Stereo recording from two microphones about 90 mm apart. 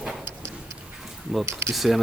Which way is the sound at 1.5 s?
30° right (ahead or behind).